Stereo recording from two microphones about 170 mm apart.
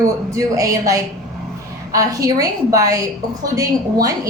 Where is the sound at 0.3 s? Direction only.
20° right (ahead or behind).